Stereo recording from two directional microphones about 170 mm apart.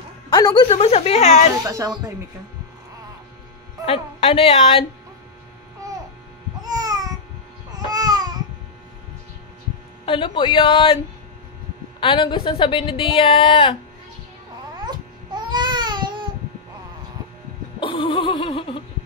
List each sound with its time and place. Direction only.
0.3 s speech: 25° left (ahead or behind)
0.7 s a woman's voice: 35° left (ahead or behind)
1.6 s speech: 20° right (ahead or behind)
3.8 s a woman's voice: 35° left (ahead or behind)
6.7 s babbling: 20° right (ahead or behind)
7.7 s baby cry: 20° right (ahead or behind)
10.0 s a man's voice: 30° left (ahead or behind)
12.0 s a woman's voice: 30° left (ahead or behind)
14.9 s babbling: 25° right (ahead or behind)
17.7 s a sound: 30° left (ahead or behind)